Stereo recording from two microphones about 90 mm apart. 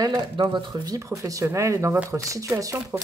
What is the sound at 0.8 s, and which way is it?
Speech, 35° right (ahead or behind).